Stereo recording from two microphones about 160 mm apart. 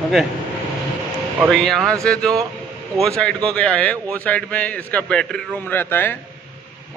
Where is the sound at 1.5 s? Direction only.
Centre (ahead or behind).